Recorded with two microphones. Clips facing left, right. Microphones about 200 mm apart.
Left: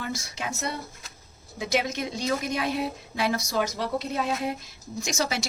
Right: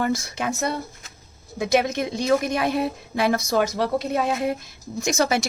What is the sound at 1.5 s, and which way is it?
A woman's voice, 55° right (ahead or behind).